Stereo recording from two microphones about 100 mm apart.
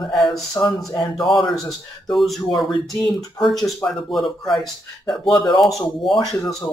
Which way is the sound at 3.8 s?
5° left (ahead or behind).